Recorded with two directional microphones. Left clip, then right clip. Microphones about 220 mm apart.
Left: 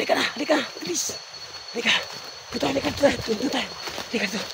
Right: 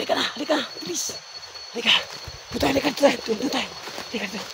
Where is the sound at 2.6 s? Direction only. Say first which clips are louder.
Right 2 dB; 35° right (ahead or behind).